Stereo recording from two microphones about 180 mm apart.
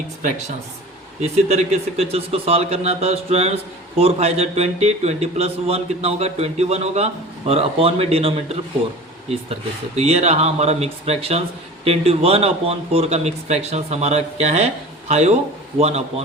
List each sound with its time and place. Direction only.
1.2 s speech: 35° right (ahead or behind)
9.9 s speech: 35° right (ahead or behind)